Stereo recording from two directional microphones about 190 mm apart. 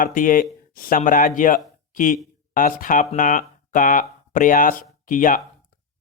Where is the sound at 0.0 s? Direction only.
45° left (ahead or behind).